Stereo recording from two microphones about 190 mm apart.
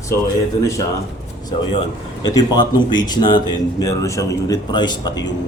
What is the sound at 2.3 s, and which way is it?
Speech, 20° left (ahead or behind).